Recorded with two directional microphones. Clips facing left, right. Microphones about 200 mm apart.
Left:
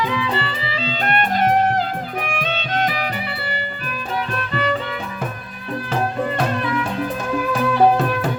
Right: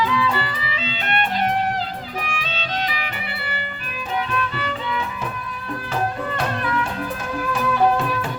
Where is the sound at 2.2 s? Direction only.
55° left (ahead or behind).